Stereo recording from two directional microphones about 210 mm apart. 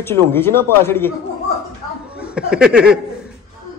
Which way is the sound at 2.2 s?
5° right (ahead or behind).